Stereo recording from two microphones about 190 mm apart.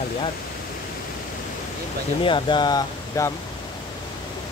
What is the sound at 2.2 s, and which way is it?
Speech, 25° left (ahead or behind).